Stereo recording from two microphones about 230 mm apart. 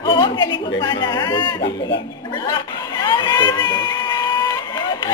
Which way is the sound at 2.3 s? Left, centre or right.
Centre.